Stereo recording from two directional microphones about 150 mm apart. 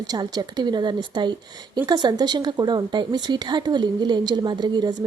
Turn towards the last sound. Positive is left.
turn(degrees=-30)  # may be behind; listen again after turning